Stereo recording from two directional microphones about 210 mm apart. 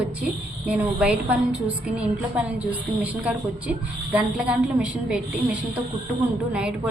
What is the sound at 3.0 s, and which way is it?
A woman's voice, 5° right (ahead or behind).